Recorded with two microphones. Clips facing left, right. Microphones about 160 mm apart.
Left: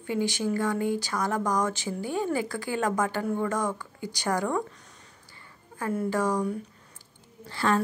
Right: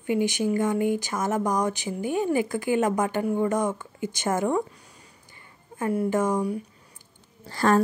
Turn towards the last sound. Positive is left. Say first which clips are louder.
# right 4 dB
turn(degrees=-45)  # may be behind; listen again after turning